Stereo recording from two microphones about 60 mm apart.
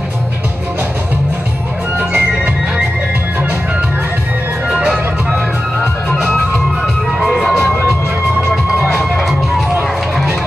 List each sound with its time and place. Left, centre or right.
2.0 s music: right
4.7 s music: centre
7.1 s music: centre
9.1 s music: centre